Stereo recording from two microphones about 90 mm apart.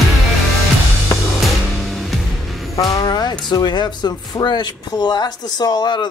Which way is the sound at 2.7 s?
40° left (ahead or behind).